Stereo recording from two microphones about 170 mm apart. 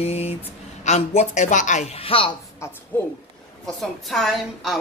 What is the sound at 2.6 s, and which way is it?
Speech, 15° left (ahead or behind).